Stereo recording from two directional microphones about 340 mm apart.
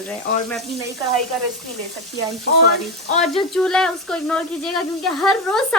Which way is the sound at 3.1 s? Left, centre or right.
Centre.